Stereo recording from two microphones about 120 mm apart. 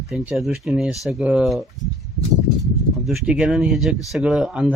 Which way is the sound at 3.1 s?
5° right (ahead or behind).